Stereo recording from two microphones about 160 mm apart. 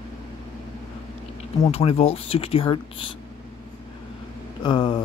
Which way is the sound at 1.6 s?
40° left (ahead or behind).